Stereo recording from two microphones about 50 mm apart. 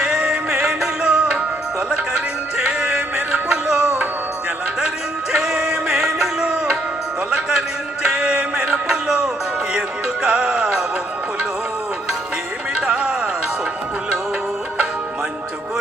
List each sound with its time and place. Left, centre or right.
0.0 s music: centre
2.6 s music: centre
5.4 s music: centre
12.7 s music: centre